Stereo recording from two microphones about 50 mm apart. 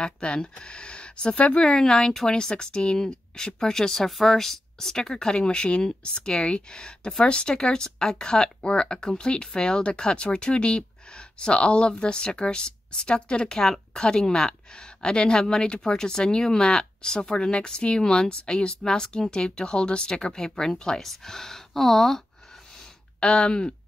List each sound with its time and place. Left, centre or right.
0.0 s speech: centre
1.7 s speech: centre
23.2 s speech: left